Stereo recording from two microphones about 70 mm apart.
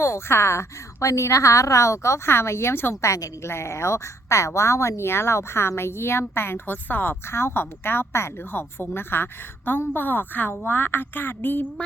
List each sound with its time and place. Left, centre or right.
0.0 s a woman's voice: left